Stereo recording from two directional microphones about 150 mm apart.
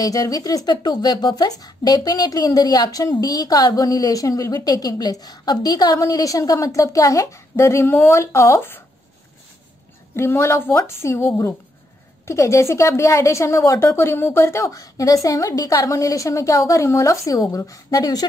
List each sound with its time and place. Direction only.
0.0 s speech: 25° left (ahead or behind)
10.1 s a woman's voice: 15° left (ahead or behind)